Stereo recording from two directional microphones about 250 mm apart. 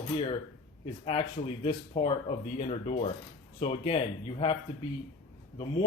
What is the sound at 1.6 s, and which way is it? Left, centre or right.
Speech, left.